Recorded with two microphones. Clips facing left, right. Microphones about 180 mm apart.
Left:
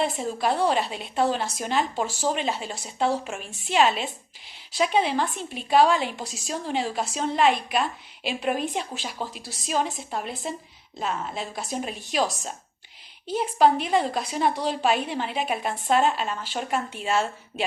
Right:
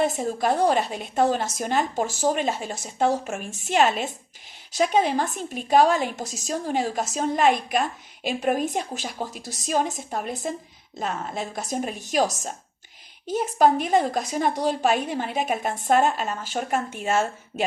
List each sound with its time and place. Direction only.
0.0 s a woman's voice: 45° right (ahead or behind)